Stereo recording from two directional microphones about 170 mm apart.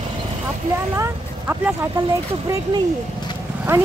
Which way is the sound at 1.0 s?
10° right (ahead or behind).